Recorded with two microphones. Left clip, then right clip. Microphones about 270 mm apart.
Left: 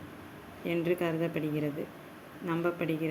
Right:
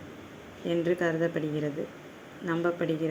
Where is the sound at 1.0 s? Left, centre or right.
Centre.